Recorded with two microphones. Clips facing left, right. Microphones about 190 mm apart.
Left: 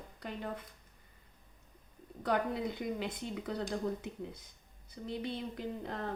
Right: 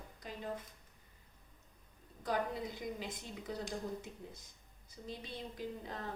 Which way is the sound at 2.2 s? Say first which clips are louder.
Left 4 dB; 65° left (ahead or behind).